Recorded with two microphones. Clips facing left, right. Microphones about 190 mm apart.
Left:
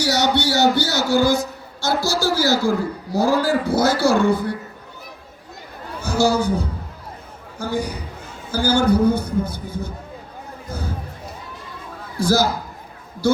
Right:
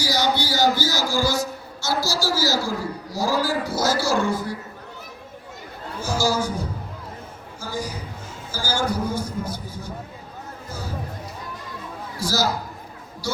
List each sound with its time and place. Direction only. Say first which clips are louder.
0.0 s a man's voice: left 4 dB; 70° left (ahead or behind)
6.0 s a man's voice: left 5 dB; 60° left (ahead or behind)
12.2 s a man's voice: left 6 dB; 55° left (ahead or behind)